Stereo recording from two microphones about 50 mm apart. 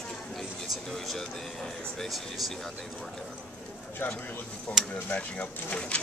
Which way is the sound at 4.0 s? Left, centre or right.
Left.